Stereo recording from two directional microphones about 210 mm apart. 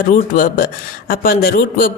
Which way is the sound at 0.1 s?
40° left (ahead or behind).